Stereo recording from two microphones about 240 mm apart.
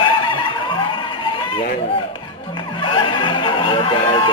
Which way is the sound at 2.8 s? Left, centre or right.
Centre.